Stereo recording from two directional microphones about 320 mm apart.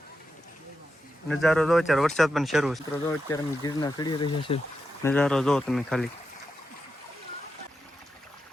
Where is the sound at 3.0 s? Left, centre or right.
Centre.